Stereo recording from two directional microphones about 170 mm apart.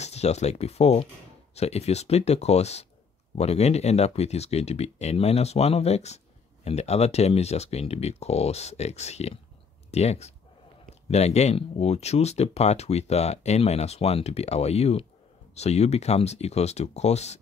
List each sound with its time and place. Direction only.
0.0 s speech: 40° left (ahead or behind)